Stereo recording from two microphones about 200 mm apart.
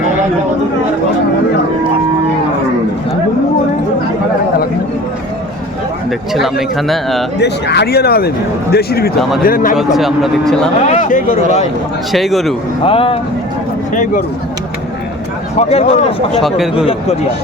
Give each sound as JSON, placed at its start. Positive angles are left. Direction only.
{"t": 6.1, "sound": "a man's voice", "side_deg": 0}
{"t": 7.3, "sound": "a man's voice", "side_deg": 55}
{"t": 9.7, "sound": "a man's voice", "side_deg": 0}
{"t": 10.8, "sound": "speech", "side_deg": 40}
{"t": 12.1, "sound": "a man's voice", "side_deg": 0}
{"t": 12.8, "sound": "speech", "side_deg": 25}
{"t": 15.5, "sound": "speech", "side_deg": 30}
{"t": 16.4, "sound": "a man's voice", "side_deg": 0}
{"t": 16.7, "sound": "speech", "side_deg": 25}